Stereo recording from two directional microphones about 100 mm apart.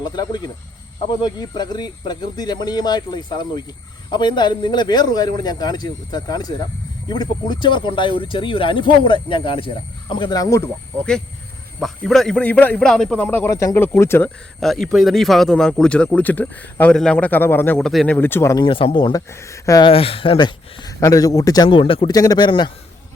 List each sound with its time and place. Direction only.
0.0 s speech: 45° left (ahead or behind)
11.8 s a man's voice: 5° left (ahead or behind)
13.1 s speech: 20° left (ahead or behind)
13.5 s speech: 30° left (ahead or behind)
14.6 s a man's voice: centre (ahead or behind); by 17.7 s 20° left (ahead or behind)
17.7 s a man's voice: 5° left (ahead or behind)
18.1 s speech: 20° left (ahead or behind)
18.5 s speech: 55° left (ahead or behind)
19.1 s speech: 30° left (ahead or behind)
19.8 s speech: 70° left (ahead or behind)
20.3 s speech: 45° left (ahead or behind)
21.0 s speech: 35° left (ahead or behind)
21.7 s speech: 65° left (ahead or behind)
22.1 s speech: 40° left (ahead or behind)